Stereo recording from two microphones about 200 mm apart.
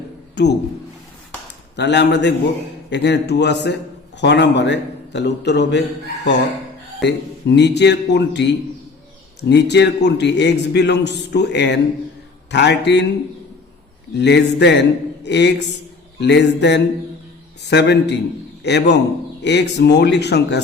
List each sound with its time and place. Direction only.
0.4 s a man's voice: 55° left (ahead or behind)
1.7 s a man's voice: 60° left (ahead or behind)
7.0 s a man's voice: 60° left (ahead or behind)
14.1 s a man's voice: 60° left (ahead or behind)